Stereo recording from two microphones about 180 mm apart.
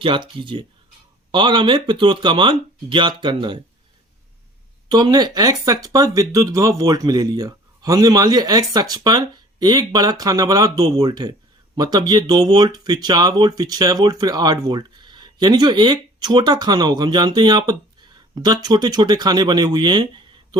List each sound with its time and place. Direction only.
0.0 s speech: 30° right (ahead or behind)
4.9 s speech: 25° right (ahead or behind)